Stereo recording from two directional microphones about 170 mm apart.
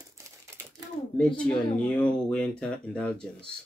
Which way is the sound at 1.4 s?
5° left (ahead or behind).